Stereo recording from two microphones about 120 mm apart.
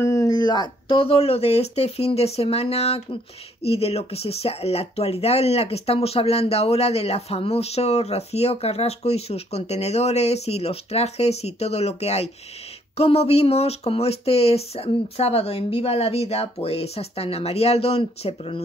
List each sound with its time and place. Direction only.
0.0 s speech: 25° left (ahead or behind); by 18.6 s 55° left (ahead or behind)